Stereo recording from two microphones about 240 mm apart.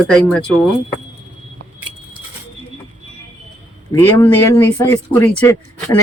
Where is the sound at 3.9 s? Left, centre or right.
Centre.